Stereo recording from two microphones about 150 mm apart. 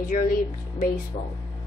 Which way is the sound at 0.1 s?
70° left (ahead or behind).